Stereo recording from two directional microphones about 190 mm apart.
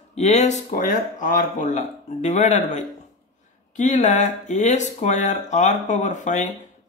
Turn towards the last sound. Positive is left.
turn(degrees=40)  # may be behind; listen again after turning